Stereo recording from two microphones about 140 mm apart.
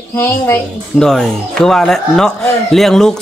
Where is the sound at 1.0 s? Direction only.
5° left (ahead or behind).